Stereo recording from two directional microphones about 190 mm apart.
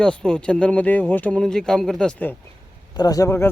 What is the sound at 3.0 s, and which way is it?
Speech, 20° left (ahead or behind).